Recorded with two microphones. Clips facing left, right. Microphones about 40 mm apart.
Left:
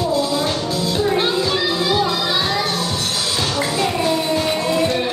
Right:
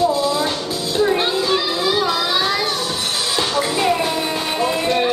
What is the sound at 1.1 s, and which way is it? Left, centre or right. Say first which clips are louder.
Music: even; centre.